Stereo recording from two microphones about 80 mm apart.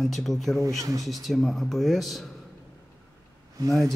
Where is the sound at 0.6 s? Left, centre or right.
Right.